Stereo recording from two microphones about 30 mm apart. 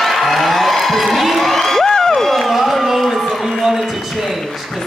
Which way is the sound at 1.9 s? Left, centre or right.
Centre.